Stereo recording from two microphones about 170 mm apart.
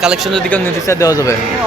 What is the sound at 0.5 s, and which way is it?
Speech, 15° left (ahead or behind).